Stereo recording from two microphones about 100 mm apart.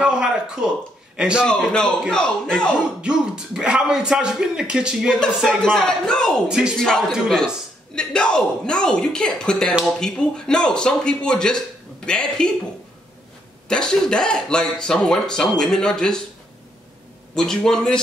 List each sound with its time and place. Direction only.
0.0 s a man's voice: 5° right (ahead or behind)
1.5 s speech: 10° left (ahead or behind)
3.0 s speech: 5° right (ahead or behind)
5.4 s a man's voice: 5° left (ahead or behind)
13.7 s speech: 5° left (ahead or behind)
17.4 s a man's voice: 5° left (ahead or behind)